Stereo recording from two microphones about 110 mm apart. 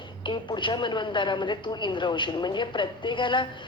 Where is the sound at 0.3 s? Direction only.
45° left (ahead or behind).